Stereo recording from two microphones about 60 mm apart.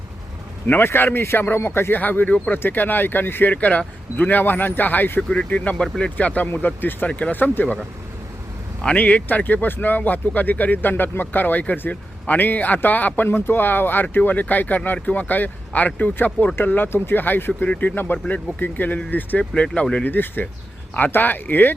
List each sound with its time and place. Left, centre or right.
0.9 s speech: left
2.0 s speech: left
3.5 s speech: left
5.3 s speech: left
9.0 s speech: left
20.1 s speech: left